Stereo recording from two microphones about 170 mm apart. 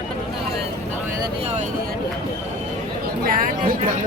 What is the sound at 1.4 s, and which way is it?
Vehicle, 40° right (ahead or behind).